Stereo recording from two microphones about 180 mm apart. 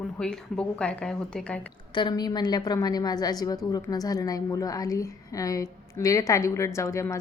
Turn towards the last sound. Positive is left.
turn(degrees=15)  # may be behind; listen again after turning